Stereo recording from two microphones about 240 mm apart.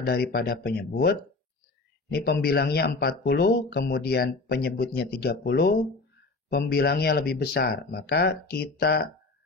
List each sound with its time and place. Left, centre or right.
0.0 s speech: left
2.1 s speech: left